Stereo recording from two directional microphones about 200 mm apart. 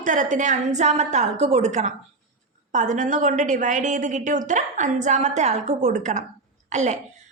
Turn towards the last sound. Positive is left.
turn(degrees=-35)  # may be behind; listen again after turning